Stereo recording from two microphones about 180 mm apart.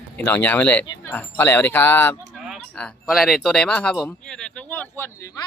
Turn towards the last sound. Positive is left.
turn(degrees=15)  # may be behind; listen again after turning